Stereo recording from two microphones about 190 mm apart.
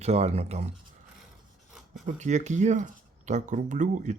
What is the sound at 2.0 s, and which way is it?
Speech, 40° right (ahead or behind).